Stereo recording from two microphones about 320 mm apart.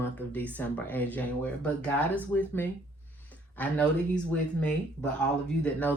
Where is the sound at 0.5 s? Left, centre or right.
Centre.